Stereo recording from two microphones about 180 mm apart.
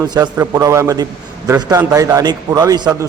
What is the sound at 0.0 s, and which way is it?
A man's voice, 20° right (ahead or behind).